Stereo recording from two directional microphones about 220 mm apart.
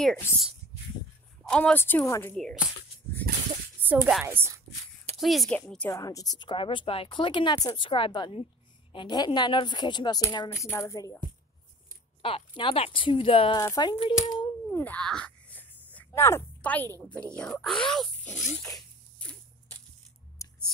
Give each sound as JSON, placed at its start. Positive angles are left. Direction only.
{"t": 0.0, "sound": "speech", "side_deg": 0}
{"t": 3.8, "sound": "a woman's voice", "side_deg": -10}
{"t": 12.2, "sound": "a woman's voice", "side_deg": 25}
{"t": 14.7, "sound": "a sound", "side_deg": 10}
{"t": 17.4, "sound": "speech", "side_deg": 5}
{"t": 18.6, "sound": "zipper", "side_deg": 5}
{"t": 20.4, "sound": "a sound", "side_deg": 15}